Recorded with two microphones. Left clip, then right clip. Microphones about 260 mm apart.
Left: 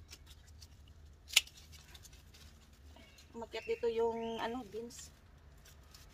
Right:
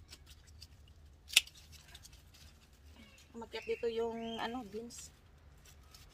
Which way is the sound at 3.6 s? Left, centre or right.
Centre.